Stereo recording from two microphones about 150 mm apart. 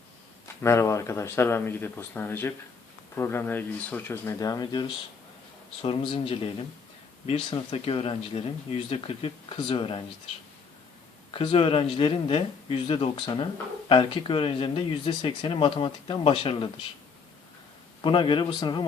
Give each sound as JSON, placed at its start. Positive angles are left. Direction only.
{"t": 0.4, "sound": "speech", "side_deg": 20}
{"t": 4.4, "sound": "speech", "side_deg": 25}
{"t": 11.3, "sound": "speech", "side_deg": 40}
{"t": 18.0, "sound": "speech", "side_deg": 35}